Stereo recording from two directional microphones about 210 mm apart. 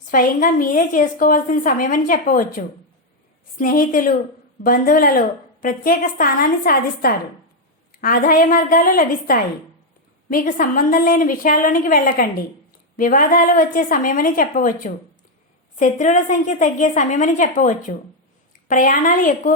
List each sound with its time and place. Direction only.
0.1 s a woman's voice: 40° left (ahead or behind)